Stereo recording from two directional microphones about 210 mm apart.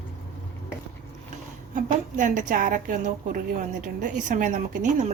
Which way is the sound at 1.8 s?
35° right (ahead or behind).